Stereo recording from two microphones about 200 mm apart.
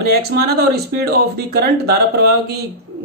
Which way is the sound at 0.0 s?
55° right (ahead or behind).